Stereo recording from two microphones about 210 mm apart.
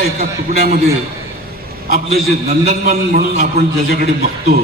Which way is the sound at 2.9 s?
45° right (ahead or behind).